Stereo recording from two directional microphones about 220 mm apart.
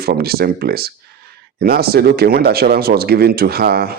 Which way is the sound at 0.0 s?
45° right (ahead or behind).